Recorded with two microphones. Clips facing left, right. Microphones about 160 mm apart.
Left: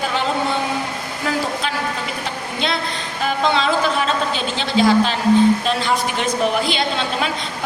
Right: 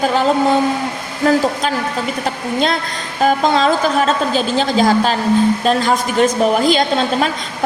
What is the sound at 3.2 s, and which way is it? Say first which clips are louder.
A woman's voice: right 5 dB; 40° right (ahead or behind).